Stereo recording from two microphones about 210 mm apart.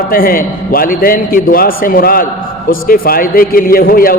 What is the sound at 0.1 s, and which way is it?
A man's voice, 45° left (ahead or behind).